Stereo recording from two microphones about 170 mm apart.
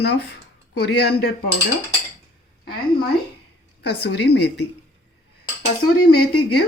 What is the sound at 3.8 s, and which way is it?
Speech, 80° left.